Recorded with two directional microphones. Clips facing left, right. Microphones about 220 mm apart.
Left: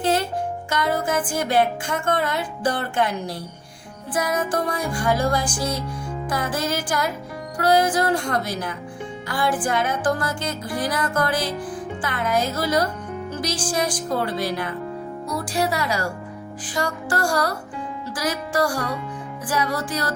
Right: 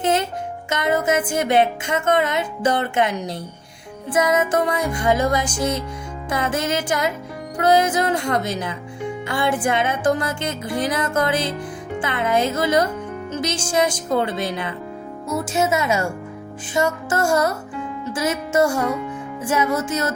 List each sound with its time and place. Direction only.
0.0 s music: 20° right (ahead or behind)
0.7 s speech: 20° right (ahead or behind)